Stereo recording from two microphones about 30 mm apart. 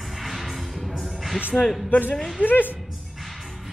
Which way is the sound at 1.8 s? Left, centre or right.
Left.